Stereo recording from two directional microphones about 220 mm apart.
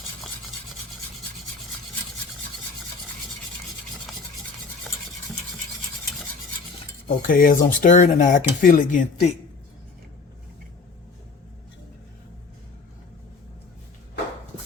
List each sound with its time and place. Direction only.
7.3 s speech: 40° left (ahead or behind)